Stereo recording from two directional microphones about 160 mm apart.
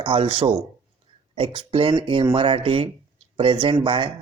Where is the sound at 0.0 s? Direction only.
30° right (ahead or behind).